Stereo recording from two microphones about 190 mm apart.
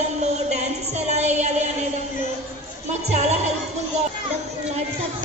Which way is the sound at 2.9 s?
35° right (ahead or behind).